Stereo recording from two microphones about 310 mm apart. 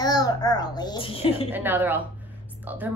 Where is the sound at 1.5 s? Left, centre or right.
Centre.